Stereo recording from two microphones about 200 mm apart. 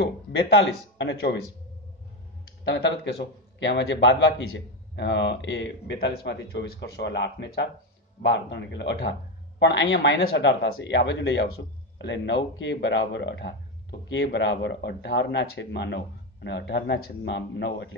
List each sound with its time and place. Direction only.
0.0 s speech: 60° left (ahead or behind)
2.6 s speech: 65° left (ahead or behind)